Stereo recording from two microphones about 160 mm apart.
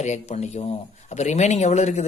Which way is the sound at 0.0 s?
45° left (ahead or behind).